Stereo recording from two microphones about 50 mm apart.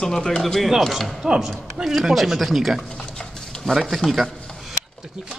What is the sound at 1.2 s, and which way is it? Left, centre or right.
A man's voice, centre.